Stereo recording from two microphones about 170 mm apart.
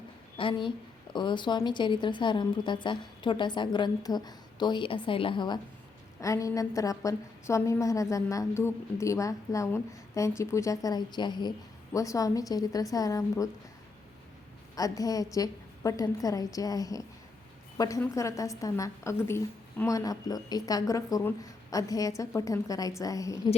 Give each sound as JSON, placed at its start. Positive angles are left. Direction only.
{"t": 0.3, "sound": "a woman's voice", "side_deg": 30}
{"t": 14.8, "sound": "a woman's voice", "side_deg": 20}